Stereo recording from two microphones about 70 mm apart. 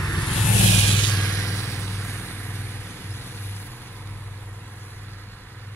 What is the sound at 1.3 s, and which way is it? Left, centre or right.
Vehicle, left.